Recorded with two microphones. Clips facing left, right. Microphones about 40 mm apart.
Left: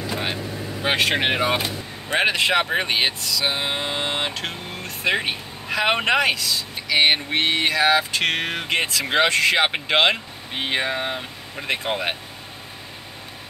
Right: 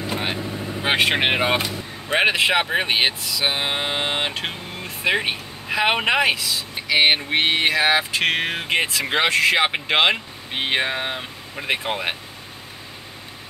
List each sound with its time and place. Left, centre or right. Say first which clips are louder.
0.8 s speech: right 1 dB; centre
1.4 s speech: right 1 dB; right
2.0 s speech: right 2 dB; centre
7.8 s speech: even; centre
10.5 s speech: right 1 dB; right; by 12.2 s centre